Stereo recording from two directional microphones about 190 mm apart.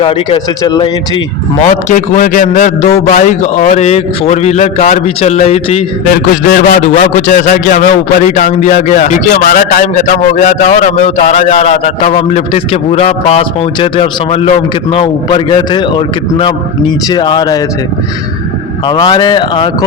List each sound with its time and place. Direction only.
0.0 s a man's voice: 25° left (ahead or behind)
1.6 s a man's voice: 40° left (ahead or behind)
6.3 s a man's voice: 45° left (ahead or behind); by 17.6 s 20° left (ahead or behind)
18.9 s a man's voice: 20° left (ahead or behind)